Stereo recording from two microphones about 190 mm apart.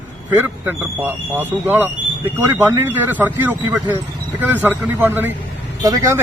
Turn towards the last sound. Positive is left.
turn(degrees=-20)  # may be behind; listen again after turning